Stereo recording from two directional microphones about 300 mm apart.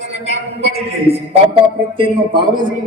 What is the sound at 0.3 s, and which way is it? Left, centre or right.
A man's voice, centre.